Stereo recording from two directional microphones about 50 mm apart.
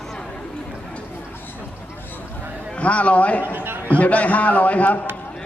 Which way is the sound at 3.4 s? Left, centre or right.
Right.